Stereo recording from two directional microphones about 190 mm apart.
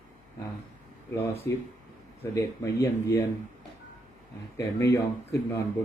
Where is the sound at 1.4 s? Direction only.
15° left (ahead or behind).